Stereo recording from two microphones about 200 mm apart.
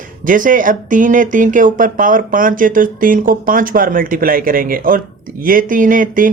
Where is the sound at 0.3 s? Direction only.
40° right (ahead or behind).